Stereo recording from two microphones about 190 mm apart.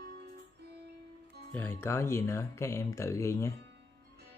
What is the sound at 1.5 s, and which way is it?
Speech, 10° left (ahead or behind).